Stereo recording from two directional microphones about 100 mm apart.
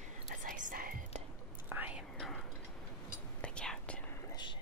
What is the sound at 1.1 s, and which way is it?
Whispering, 90° right.